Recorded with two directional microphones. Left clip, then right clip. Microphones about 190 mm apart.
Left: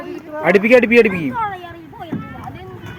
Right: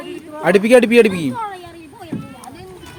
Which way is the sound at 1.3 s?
5° right (ahead or behind).